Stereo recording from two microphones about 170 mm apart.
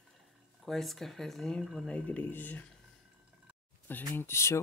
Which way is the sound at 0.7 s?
Centre (ahead or behind).